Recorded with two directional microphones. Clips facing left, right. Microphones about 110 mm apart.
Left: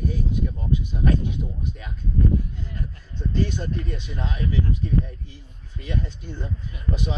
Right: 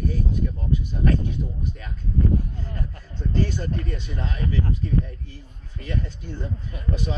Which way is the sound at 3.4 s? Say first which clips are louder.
Left 1 dB; 15° left (ahead or behind).